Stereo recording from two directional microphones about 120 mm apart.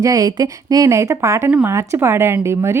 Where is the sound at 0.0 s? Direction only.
30° right (ahead or behind).